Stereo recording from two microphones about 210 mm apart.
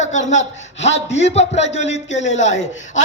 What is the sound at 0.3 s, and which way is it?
A man's voice, 30° left (ahead or behind).